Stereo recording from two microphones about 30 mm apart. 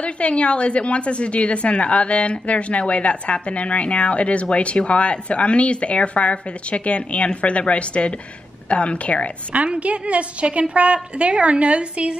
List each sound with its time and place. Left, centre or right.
0.0 s a woman's voice: left
9.8 s a woman's voice: right